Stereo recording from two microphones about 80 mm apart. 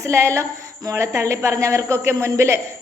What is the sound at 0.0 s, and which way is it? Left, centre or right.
A woman's voice, right.